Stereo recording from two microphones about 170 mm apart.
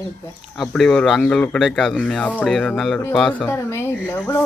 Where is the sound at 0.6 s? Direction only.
5° left (ahead or behind).